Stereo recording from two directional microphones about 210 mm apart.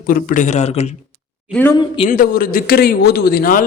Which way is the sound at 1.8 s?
25° left (ahead or behind).